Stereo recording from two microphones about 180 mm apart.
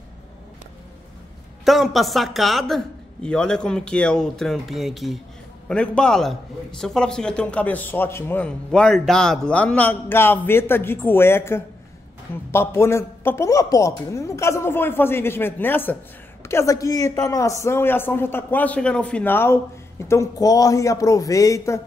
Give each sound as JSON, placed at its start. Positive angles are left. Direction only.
{"t": 1.6, "sound": "a man's voice", "side_deg": 0}